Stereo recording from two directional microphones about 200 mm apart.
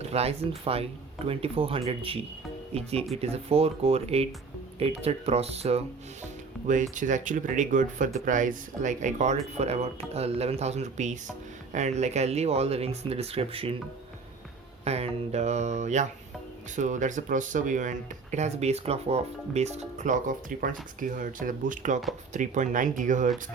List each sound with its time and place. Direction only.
0.0 s speech: 30° right (ahead or behind)
6.9 s speech: 40° right (ahead or behind)
14.8 s speech: 30° right (ahead or behind)